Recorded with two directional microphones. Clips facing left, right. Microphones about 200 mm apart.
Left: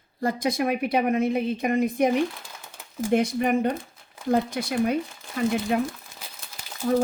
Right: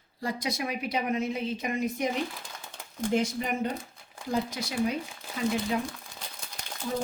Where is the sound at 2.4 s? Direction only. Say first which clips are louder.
Even; 5° left (ahead or behind).